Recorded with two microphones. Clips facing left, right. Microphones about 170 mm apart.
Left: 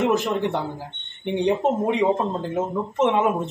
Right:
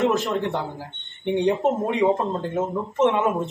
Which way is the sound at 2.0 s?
Centre (ahead or behind).